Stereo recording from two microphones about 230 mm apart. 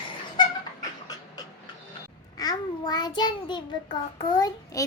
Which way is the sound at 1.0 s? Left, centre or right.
Centre.